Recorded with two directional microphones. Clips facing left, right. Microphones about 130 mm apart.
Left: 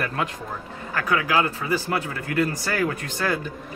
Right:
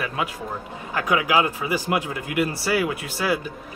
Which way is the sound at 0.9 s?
15° right (ahead or behind).